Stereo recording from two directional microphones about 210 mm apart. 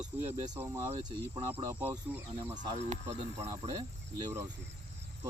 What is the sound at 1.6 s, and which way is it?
Speech, 10° right (ahead or behind).